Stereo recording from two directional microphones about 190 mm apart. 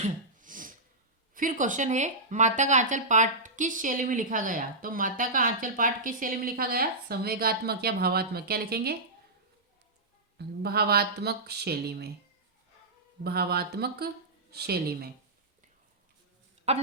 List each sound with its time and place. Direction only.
0.0 s throat clearing: 45° right (ahead or behind)
1.3 s speech: 45° right (ahead or behind)
10.3 s speech: 55° right (ahead or behind)
13.2 s speech: 55° right (ahead or behind)
16.7 s a woman's voice: 35° right (ahead or behind)